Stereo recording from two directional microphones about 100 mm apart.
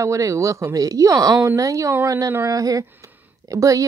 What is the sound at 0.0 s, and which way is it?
Speech, 30° right (ahead or behind).